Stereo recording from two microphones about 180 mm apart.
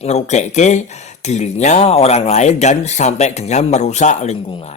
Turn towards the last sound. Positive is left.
turn(degrees=30)  # may be behind; listen again after turning